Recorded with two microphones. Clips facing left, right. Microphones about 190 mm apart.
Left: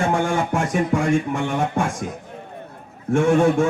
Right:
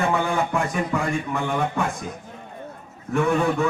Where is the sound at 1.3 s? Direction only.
45° left (ahead or behind).